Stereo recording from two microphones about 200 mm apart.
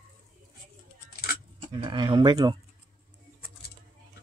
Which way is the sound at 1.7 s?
25° right (ahead or behind).